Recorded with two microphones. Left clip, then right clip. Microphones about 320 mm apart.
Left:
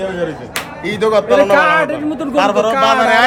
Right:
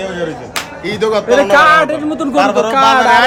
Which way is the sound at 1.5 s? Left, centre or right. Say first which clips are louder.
Right 4 dB; right.